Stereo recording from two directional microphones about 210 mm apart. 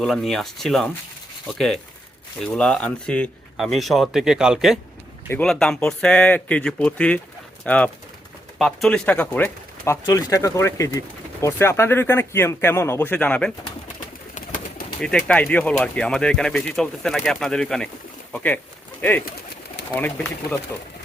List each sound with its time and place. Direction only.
0.0 s speech: centre (ahead or behind)
14.3 s bird: 40° left (ahead or behind)
15.0 s speech: 5° left (ahead or behind)
20.0 s speech: 10° left (ahead or behind)